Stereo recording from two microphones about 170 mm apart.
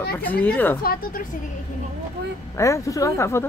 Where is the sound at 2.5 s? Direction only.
15° left (ahead or behind).